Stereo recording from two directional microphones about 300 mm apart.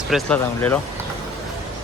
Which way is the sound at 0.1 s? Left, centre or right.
Centre.